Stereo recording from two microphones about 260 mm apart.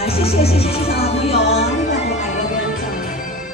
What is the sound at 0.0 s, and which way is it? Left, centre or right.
Music, left.